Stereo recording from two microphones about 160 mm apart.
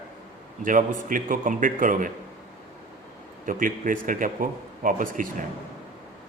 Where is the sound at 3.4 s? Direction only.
60° right (ahead or behind).